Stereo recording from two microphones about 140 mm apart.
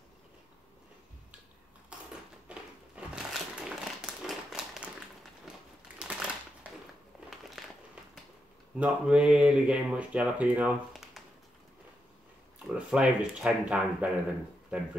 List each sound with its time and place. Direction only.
2.4 s crumpling: 10° right (ahead or behind)
5.9 s typewriter: 5° right (ahead or behind)
7.2 s crumpling: centre (ahead or behind)
8.7 s speech: 10° right (ahead or behind)
12.6 s speech: 5° right (ahead or behind)